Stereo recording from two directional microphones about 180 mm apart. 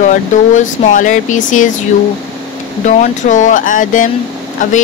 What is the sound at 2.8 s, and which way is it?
Speech, 45° left (ahead or behind).